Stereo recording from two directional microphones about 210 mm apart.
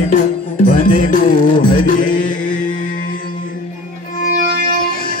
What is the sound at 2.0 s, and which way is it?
Mantra, 40° left (ahead or behind).